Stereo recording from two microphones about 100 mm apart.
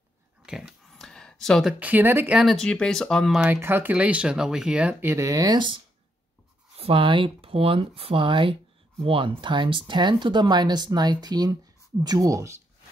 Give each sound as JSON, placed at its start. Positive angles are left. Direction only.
{"t": 0.5, "sound": "a sound", "side_deg": -5}
{"t": 1.6, "sound": "speech", "side_deg": -5}
{"t": 1.9, "sound": "speech", "side_deg": -20}
{"t": 2.3, "sound": "speech", "side_deg": 0}
{"t": 3.6, "sound": "speech", "side_deg": -20}
{"t": 3.9, "sound": "speech", "side_deg": -10}
{"t": 5.0, "sound": "speech", "side_deg": -30}
{"t": 6.8, "sound": "speech", "side_deg": -65}